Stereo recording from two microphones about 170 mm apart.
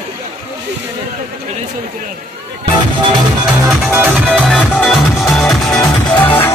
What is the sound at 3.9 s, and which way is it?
Music, 10° right (ahead or behind).